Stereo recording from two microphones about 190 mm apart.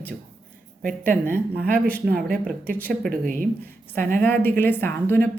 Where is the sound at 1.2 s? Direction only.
10° left (ahead or behind).